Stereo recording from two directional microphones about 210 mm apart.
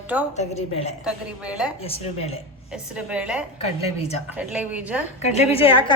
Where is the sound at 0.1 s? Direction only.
5° right (ahead or behind).